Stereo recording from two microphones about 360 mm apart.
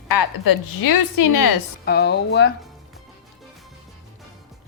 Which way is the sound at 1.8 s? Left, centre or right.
Left.